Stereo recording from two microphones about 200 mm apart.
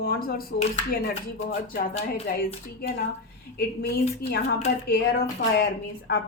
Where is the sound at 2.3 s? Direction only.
55° left (ahead or behind).